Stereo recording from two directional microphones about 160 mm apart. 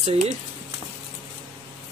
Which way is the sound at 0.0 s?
40° right (ahead or behind).